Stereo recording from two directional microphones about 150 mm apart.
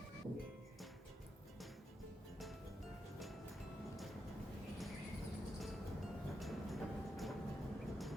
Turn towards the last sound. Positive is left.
turn(degrees=0)  # may be behind; listen again after turning